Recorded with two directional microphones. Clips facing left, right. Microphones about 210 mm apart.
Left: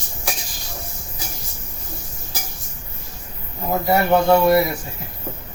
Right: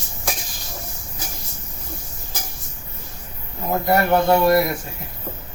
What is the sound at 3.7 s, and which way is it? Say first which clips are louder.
Speech: left 1 dB; centre (ahead or behind).